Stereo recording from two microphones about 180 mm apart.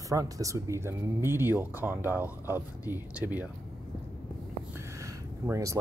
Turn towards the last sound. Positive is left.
turn(degrees=-15)  # may be behind; listen again after turning